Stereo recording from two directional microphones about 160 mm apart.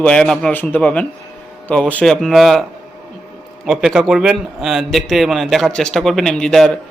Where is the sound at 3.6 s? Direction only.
Centre (ahead or behind).